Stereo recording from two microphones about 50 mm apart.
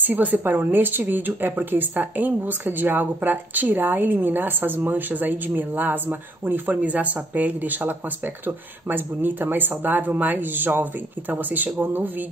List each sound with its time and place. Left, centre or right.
0.0 s a woman's voice: right
6.8 s a woman's voice: right